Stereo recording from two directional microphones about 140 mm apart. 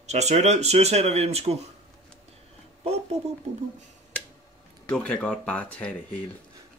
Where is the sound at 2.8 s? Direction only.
50° right (ahead or behind).